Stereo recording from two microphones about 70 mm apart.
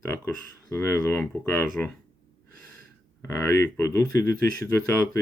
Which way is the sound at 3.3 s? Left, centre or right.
Left.